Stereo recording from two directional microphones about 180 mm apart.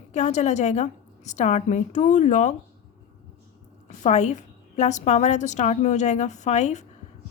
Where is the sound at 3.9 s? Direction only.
40° left (ahead or behind).